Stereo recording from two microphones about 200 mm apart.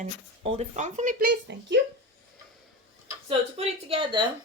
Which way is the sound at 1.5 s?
60° right (ahead or behind).